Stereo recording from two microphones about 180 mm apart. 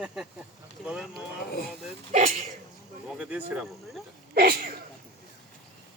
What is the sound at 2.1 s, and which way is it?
Speech, 45° right (ahead or behind).